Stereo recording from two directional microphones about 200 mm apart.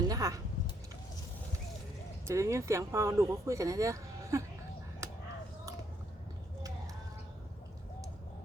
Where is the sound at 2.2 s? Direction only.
15° right (ahead or behind).